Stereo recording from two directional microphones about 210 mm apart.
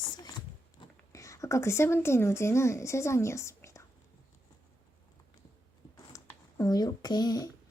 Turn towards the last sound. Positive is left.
turn(degrees=20)  # may be behind; listen again after turning